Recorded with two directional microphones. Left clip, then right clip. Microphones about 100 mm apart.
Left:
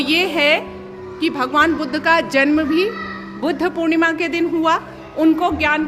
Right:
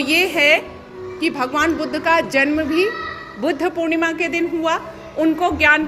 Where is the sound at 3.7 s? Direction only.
40° left (ahead or behind).